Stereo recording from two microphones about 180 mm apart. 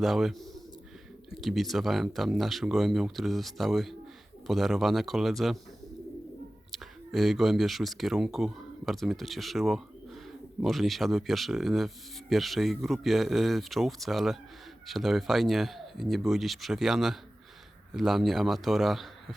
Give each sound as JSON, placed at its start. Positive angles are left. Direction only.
{"t": 0.0, "sound": "speech", "side_deg": 0}
{"t": 6.7, "sound": "speech", "side_deg": 0}